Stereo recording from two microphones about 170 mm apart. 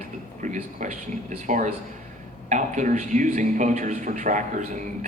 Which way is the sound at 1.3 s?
45° right (ahead or behind).